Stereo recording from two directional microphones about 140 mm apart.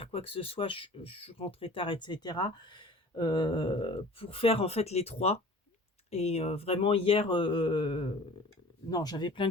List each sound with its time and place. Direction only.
0.0 s speech: 40° left (ahead or behind)
8.9 s speech: 25° left (ahead or behind)